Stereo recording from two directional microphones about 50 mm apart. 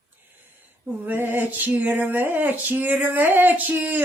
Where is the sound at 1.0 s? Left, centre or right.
Right.